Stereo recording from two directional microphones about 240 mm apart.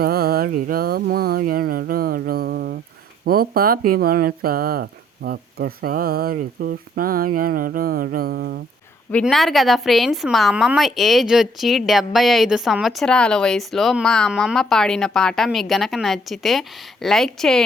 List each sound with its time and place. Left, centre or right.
0.0 s speech: right
9.1 s a woman's voice: centre